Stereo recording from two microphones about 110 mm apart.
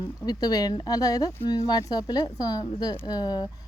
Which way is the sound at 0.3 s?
35° left (ahead or behind).